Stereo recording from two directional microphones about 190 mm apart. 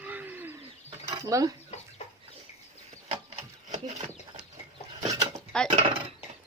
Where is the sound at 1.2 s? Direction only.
15° right (ahead or behind).